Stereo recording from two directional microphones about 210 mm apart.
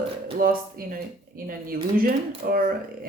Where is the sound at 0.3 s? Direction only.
45° right (ahead or behind).